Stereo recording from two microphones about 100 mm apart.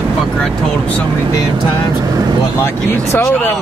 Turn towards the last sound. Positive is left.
turn(degrees=20)  # may be behind; listen again after turning